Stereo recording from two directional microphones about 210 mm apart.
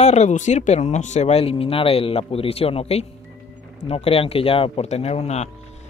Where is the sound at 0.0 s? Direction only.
35° left (ahead or behind).